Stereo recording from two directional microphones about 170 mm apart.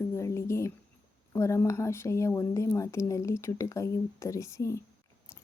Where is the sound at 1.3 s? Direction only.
15° left (ahead or behind).